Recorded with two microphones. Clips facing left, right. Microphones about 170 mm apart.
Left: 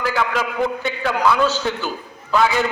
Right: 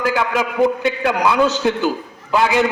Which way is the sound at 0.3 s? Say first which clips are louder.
Right 5 dB; 15° right (ahead or behind).